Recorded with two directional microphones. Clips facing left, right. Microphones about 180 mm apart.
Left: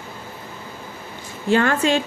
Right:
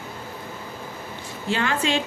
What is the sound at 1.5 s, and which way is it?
Speech, 50° left (ahead or behind).